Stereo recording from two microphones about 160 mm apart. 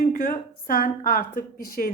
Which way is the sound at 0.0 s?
60° left (ahead or behind).